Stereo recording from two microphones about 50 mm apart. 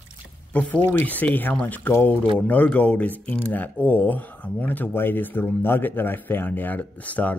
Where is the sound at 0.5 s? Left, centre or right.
Left.